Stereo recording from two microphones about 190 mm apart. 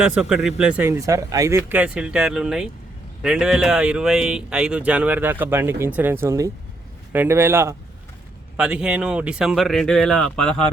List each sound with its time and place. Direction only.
0.0 s speech: 5° right (ahead or behind)